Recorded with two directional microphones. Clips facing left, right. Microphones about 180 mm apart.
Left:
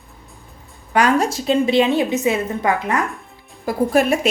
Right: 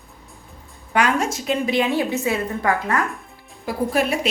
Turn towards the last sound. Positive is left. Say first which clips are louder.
# left 5 dB
turn(degrees=45)  # may be behind; listen again after turning